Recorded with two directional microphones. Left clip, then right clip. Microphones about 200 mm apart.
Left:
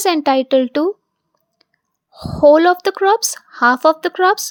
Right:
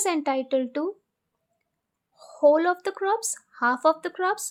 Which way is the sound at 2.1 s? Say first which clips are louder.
Left 9 dB; 35° left (ahead or behind).